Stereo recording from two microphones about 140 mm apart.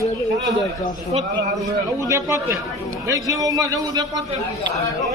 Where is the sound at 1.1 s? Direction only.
40° right (ahead or behind).